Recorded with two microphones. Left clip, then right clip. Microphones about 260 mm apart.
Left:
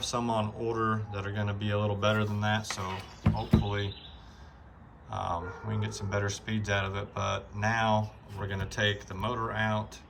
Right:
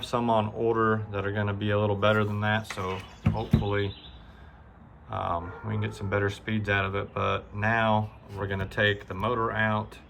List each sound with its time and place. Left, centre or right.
0.0 s speech: centre
5.1 s speech: centre